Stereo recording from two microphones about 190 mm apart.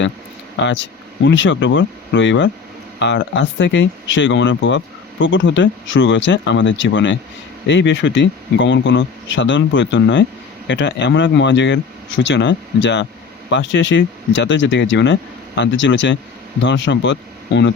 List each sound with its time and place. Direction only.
0.5 s speech: 70° left (ahead or behind)